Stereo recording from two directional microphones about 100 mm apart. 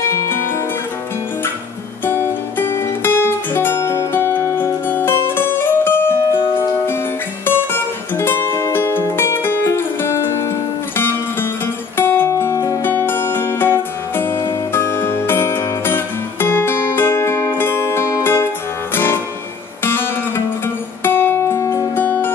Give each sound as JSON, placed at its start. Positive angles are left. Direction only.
{"t": 2.0, "sound": "music", "side_deg": 25}
{"t": 11.6, "sound": "music", "side_deg": 20}
{"t": 19.8, "sound": "music", "side_deg": 20}